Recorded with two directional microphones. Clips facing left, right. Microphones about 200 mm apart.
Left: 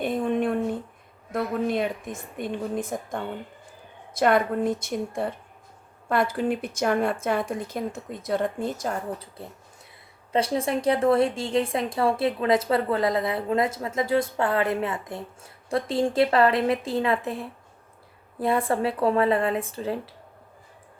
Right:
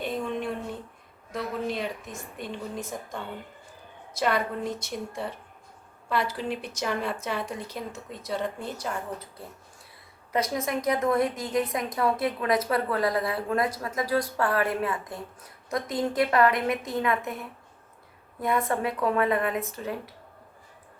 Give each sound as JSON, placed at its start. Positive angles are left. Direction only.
{"t": 0.0, "sound": "a sound", "side_deg": 55}
{"t": 1.3, "sound": "a woman's voice", "side_deg": 55}
{"t": 4.1, "sound": "a woman's voice", "side_deg": 50}
{"t": 10.3, "sound": "a woman's voice", "side_deg": 30}